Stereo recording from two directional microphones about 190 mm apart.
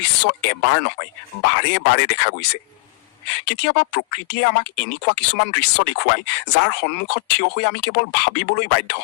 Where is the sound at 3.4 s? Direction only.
65° left (ahead or behind).